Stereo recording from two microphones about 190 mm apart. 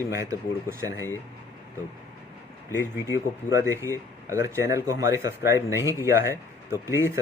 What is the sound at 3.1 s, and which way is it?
Speech, 15° right (ahead or behind).